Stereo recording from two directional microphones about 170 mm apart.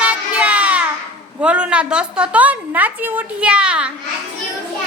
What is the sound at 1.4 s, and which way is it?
Speech, 5° right (ahead or behind).